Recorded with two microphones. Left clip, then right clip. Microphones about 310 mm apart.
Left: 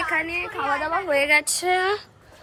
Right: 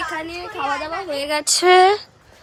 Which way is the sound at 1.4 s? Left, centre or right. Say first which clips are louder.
Right 9 dB; right.